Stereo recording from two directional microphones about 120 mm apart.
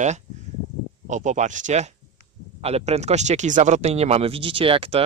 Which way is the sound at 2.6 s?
60° right (ahead or behind).